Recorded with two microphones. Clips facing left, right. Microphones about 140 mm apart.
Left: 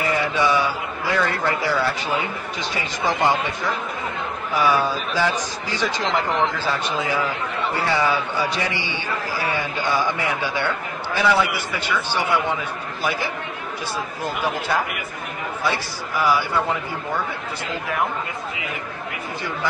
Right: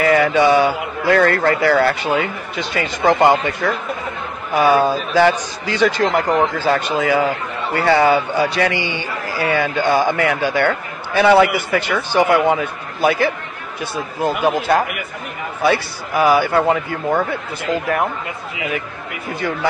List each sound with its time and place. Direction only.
0.0 s a man's voice: 85° right; by 17.2 s 60° right (ahead or behind)